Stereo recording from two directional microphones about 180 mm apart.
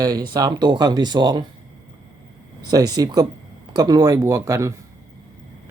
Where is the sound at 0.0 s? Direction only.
20° right (ahead or behind).